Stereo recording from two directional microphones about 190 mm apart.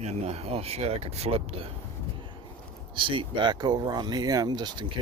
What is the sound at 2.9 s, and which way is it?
Speech, 25° right (ahead or behind).